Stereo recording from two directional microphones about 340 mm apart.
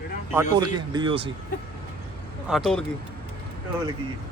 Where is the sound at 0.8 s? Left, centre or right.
Centre.